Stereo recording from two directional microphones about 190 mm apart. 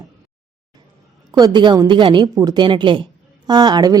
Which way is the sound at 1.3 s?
20° right (ahead or behind).